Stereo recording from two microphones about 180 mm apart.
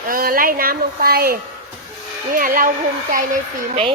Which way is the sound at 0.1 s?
55° right (ahead or behind).